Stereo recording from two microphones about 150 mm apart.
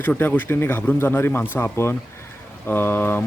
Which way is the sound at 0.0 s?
10° left (ahead or behind).